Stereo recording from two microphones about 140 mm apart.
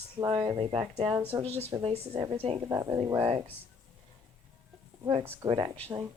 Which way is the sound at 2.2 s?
40° right (ahead or behind).